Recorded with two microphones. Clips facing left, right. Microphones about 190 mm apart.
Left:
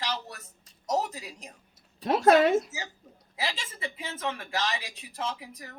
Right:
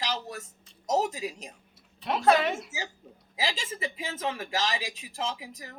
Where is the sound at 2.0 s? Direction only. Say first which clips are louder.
Left 3 dB; 45° left (ahead or behind).